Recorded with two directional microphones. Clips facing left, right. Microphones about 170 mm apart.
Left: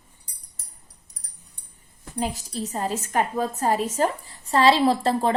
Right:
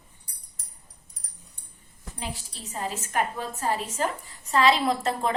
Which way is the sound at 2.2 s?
40° left (ahead or behind).